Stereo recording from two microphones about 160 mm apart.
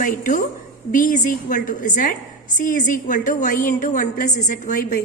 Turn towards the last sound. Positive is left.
turn(degrees=50)  # may be behind; listen again after turning